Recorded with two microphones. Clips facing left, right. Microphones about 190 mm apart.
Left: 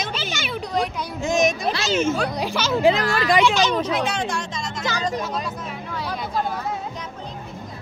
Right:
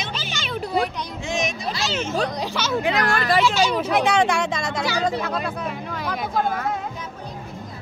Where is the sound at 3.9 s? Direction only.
60° right (ahead or behind).